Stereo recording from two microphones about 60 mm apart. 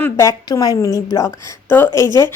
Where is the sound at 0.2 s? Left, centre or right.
Left.